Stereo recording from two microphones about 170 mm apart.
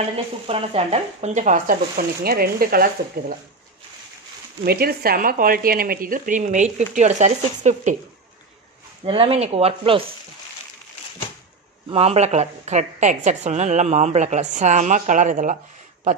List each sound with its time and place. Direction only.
0.1 s a woman's voice: 35° right (ahead or behind); by 2.9 s 60° right (ahead or behind)
4.6 s a woman's voice: 65° right (ahead or behind); by 7.9 s 45° right (ahead or behind)
9.0 s speech: 35° right (ahead or behind)
11.9 s a woman's voice: 35° right (ahead or behind)